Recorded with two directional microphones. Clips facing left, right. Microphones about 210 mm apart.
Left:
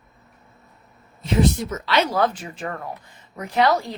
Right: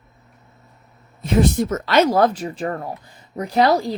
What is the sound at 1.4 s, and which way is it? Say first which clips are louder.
A woman's voice: right 3 dB; 50° right (ahead or behind).